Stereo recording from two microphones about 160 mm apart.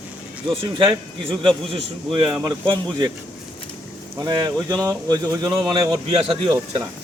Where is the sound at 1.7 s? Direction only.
30° right (ahead or behind).